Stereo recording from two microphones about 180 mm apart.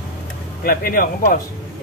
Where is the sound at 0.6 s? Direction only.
55° left (ahead or behind).